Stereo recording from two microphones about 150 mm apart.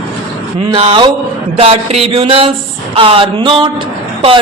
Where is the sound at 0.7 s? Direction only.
35° right (ahead or behind).